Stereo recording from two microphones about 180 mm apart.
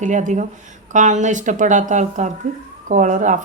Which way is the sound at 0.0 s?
45° right (ahead or behind).